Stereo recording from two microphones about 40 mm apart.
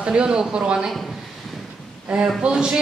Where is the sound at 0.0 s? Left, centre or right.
Right.